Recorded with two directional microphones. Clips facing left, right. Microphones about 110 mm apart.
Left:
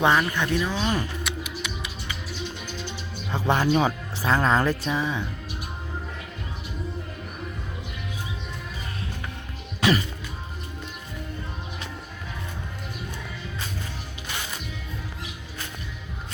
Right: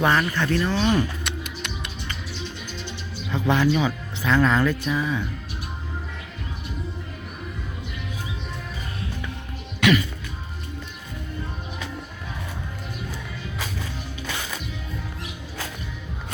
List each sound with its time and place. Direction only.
0.0 s speech: 15° left (ahead or behind)
1.2 s music: 5° left (ahead or behind)
3.2 s speech: 30° left (ahead or behind)
9.8 s music: 30° left (ahead or behind)